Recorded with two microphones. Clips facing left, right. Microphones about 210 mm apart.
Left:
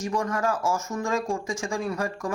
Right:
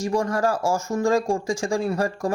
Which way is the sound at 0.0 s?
30° right (ahead or behind).